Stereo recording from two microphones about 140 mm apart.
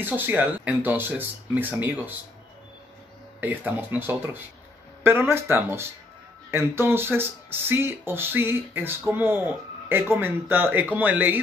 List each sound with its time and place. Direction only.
0.0 s speech: 10° right (ahead or behind)
3.3 s speech: 10° right (ahead or behind)